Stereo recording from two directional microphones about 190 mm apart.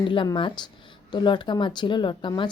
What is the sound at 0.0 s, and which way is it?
A woman's voice, 25° left (ahead or behind).